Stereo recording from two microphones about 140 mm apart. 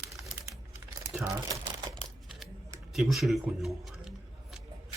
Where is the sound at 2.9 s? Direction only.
Centre (ahead or behind).